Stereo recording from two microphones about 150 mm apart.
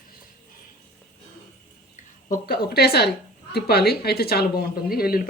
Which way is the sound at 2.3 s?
90° left.